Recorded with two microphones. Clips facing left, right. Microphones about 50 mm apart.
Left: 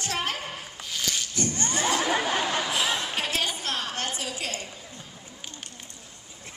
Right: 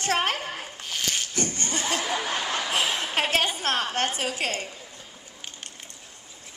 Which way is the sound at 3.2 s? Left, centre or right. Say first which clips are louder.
Right 4 dB; right.